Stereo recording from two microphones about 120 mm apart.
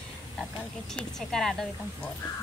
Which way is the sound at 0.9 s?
5° left (ahead or behind).